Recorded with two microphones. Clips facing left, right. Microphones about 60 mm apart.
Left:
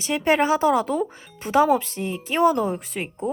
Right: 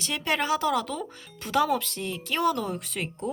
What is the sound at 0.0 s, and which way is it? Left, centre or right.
Speech, left.